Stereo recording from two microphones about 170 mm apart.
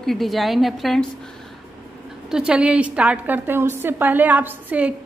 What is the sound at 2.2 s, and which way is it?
A woman's voice, 5° right (ahead or behind).